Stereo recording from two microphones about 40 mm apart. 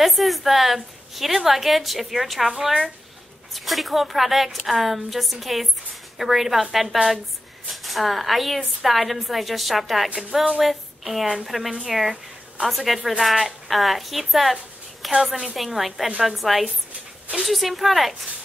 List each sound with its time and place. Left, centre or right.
0.0 s a woman's voice: centre
10.6 s a sound: centre
11.4 s a woman's voice: centre